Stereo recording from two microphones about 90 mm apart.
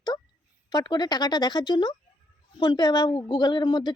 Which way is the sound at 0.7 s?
50° left (ahead or behind).